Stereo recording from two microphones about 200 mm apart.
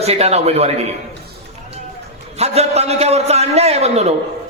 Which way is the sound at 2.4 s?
30° right (ahead or behind).